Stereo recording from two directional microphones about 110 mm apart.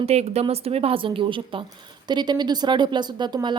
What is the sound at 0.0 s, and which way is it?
A woman's voice, 70° right (ahead or behind).